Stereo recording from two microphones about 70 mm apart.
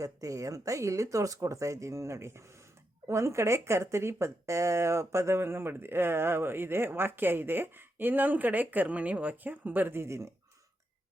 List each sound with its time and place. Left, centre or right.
0.0 s speech: right
10.0 s speech: right